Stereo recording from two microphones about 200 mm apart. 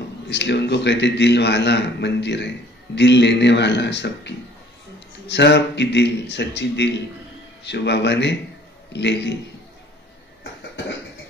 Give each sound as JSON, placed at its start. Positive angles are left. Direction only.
{"t": 0.3, "sound": "a man's voice", "side_deg": 60}